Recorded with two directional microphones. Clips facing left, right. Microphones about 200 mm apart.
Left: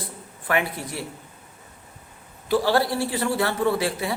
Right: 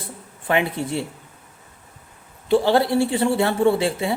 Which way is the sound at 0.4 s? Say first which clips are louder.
Right 4 dB; 25° right (ahead or behind).